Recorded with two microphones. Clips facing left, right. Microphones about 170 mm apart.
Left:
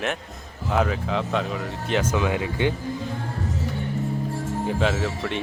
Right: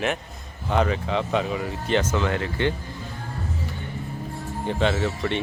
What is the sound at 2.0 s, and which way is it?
Speech, 10° left (ahead or behind).